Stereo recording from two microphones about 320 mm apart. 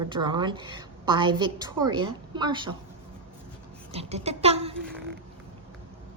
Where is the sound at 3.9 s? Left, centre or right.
Centre.